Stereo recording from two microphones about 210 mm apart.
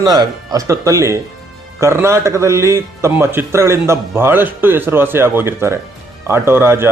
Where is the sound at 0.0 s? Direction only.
20° right (ahead or behind).